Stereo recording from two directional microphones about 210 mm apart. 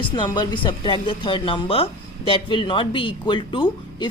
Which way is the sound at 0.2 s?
20° left (ahead or behind).